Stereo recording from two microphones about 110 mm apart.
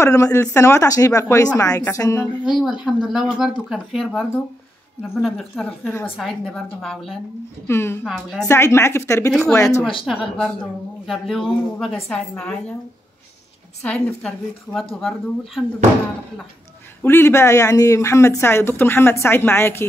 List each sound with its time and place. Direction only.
0.0 s speech: 30° left (ahead or behind)
2.8 s a woman's voice: 5° right (ahead or behind)
5.9 s speech: 20° left (ahead or behind)
6.1 s a woman's voice: centre (ahead or behind)
7.6 s speech: 20° left (ahead or behind)
8.0 s a woman's voice: 5° left (ahead or behind)
8.5 s speech: 25° left (ahead or behind)
10.0 s a woman's voice: centre (ahead or behind)
13.8 s a woman's voice: 10° left (ahead or behind)
17.0 s speech: 20° left (ahead or behind)